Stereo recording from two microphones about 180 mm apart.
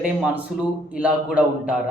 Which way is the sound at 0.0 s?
5° right (ahead or behind).